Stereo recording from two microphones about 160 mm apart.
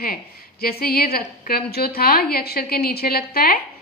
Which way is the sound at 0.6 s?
70° left (ahead or behind).